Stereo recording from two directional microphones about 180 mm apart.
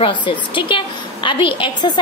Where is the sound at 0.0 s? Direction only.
25° left (ahead or behind).